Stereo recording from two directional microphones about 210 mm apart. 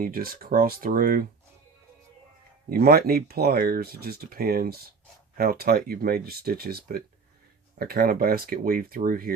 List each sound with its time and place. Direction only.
0.0 s speech: 45° right (ahead or behind)
2.6 s speech: 45° right (ahead or behind)